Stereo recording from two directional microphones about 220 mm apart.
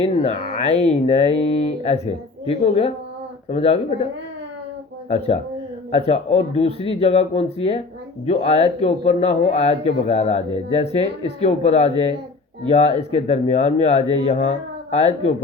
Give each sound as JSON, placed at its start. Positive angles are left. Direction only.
{"t": 0.0, "sound": "a man's voice", "side_deg": 30}